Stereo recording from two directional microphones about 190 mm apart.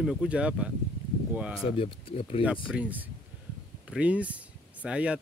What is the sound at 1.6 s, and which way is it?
Speech, 30° left (ahead or behind).